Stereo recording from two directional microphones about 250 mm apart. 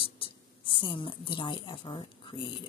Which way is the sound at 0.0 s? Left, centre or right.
Left.